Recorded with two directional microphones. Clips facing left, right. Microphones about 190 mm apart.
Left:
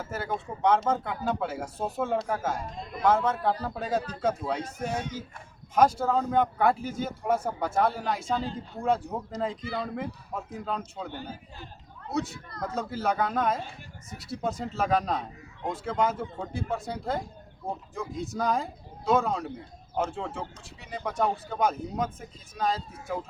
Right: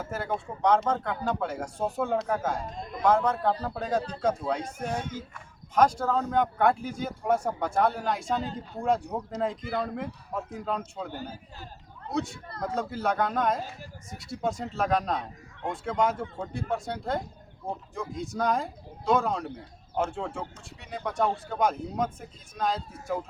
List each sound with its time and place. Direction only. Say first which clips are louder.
0.0 s speech: right 1 dB; centre (ahead or behind)
11.1 s a man's voice: right 1 dB; 40° right (ahead or behind)
12.6 s speech: even; centre (ahead or behind)